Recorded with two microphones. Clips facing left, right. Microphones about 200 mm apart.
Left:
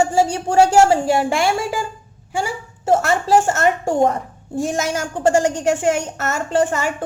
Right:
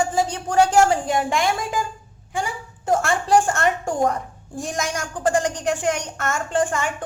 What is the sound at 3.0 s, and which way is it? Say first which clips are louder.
Speech: right 1 dB; 5° left (ahead or behind).